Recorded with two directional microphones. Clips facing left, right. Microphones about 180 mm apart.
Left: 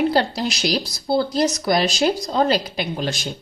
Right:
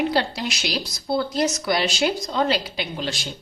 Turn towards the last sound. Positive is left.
turn(degrees=45)  # may be behind; listen again after turning